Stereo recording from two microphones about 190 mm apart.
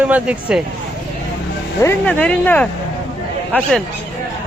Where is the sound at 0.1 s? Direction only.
5° right (ahead or behind).